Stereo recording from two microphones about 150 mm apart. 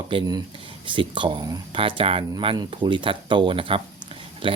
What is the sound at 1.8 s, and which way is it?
Speech, 40° right (ahead or behind).